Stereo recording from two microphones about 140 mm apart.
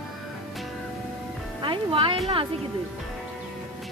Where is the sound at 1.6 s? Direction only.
35° right (ahead or behind).